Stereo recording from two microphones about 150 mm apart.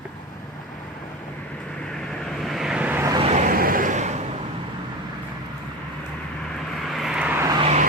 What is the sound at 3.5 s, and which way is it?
Vehicle, 75° right (ahead or behind).